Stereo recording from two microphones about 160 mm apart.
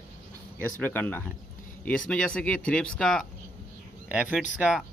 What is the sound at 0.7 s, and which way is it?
Speech, 10° left (ahead or behind).